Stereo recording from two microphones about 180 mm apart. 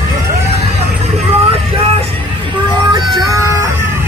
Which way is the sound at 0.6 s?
35° right (ahead or behind).